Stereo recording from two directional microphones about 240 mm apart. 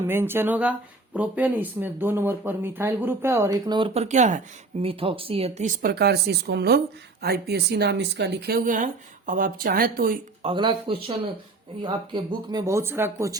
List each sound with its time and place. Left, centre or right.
0.0 s speech: centre; by 10.2 s right
10.4 s speech: right